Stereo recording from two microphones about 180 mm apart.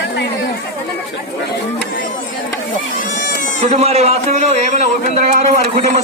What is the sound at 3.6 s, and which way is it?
A man's voice, 35° right (ahead or behind).